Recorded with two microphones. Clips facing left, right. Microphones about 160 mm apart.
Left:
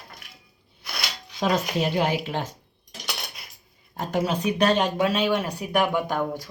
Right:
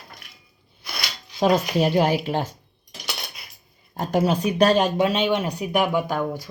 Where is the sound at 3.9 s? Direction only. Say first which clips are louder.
Right 4 dB; 35° right (ahead or behind); by 6.0 s 15° right (ahead or behind).